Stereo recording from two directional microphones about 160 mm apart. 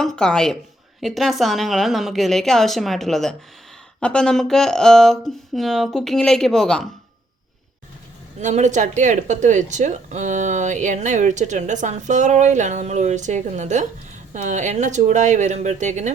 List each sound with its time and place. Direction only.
0.0 s speech: 5° left (ahead or behind)
8.4 s speech: 45° right (ahead or behind)